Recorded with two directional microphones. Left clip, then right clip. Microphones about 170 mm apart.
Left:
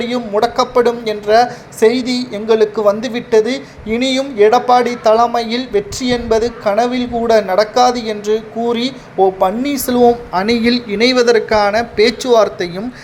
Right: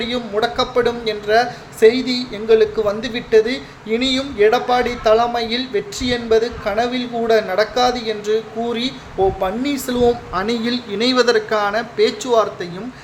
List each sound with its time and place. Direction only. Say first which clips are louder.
0.0 s a woman's voice: left 4 dB; 25° left (ahead or behind)